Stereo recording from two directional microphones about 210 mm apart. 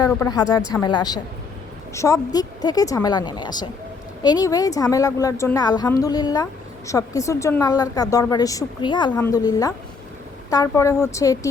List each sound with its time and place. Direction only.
0.0 s a woman's voice: 20° left (ahead or behind)